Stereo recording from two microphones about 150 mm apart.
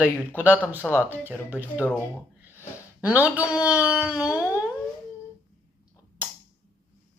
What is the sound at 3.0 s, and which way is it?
Speech, 10° right (ahead or behind).